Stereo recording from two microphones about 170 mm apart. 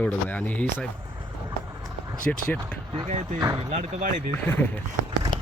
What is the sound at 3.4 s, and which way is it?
Speech, 20° right (ahead or behind).